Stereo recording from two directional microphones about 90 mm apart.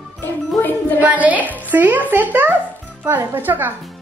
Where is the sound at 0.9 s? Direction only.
20° right (ahead or behind).